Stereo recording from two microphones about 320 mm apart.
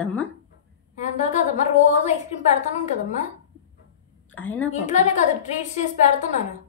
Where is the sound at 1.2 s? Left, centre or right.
Left.